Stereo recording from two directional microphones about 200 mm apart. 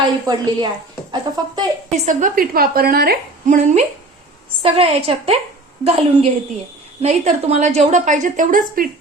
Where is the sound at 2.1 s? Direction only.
40° right (ahead or behind).